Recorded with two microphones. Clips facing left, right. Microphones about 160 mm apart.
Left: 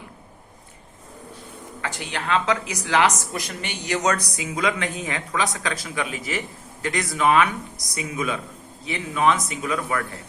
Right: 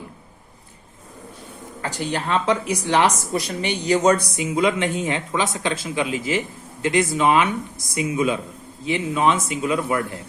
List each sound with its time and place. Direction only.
1.8 s speech: 40° right (ahead or behind)